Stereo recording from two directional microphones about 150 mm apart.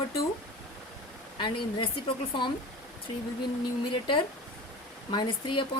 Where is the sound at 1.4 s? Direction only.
30° left (ahead or behind).